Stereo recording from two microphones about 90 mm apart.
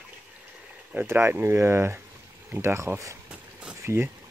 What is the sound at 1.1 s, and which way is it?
Speech, 25° right (ahead or behind).